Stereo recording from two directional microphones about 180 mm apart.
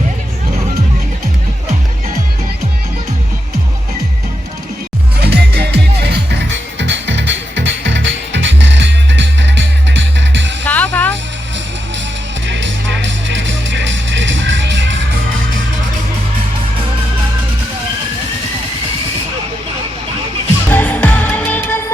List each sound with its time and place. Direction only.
5.2 s music: 65° right (ahead or behind)
6.7 s music: 80° right
10.6 s music: 10° left (ahead or behind)
12.5 s music: 90° right
20.7 s music: 10° left (ahead or behind)